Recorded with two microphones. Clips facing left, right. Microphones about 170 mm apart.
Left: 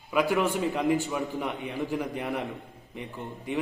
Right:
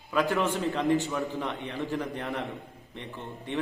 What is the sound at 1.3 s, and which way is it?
A man's voice, 15° left (ahead or behind).